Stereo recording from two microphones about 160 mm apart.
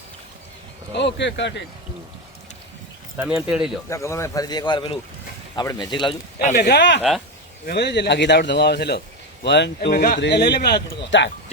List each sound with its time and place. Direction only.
0.9 s speech: 90° left
3.2 s speech: 5° right (ahead or behind)
3.8 s speech: 20° left (ahead or behind)
6.6 s speech: 90° left